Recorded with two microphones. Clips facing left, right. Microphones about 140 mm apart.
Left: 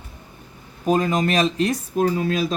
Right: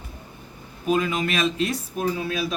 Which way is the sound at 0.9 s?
40° left (ahead or behind).